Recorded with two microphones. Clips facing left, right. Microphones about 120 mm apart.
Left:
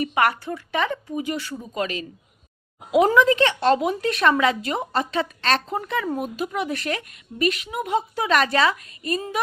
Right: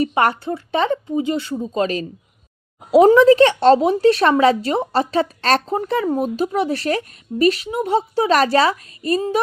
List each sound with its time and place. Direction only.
0.0 s a woman's voice: 30° right (ahead or behind)